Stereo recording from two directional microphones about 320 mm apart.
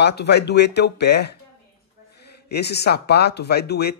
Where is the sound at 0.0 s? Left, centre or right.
Left.